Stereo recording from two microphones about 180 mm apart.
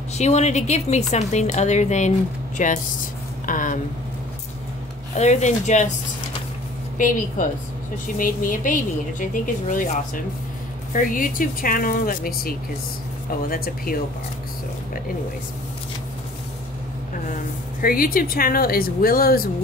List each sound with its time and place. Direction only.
0.2 s a woman's voice: 40° left (ahead or behind)
5.1 s a woman's voice: 40° left (ahead or behind)
7.0 s speech: 45° left (ahead or behind)
17.8 s speech: 50° left (ahead or behind)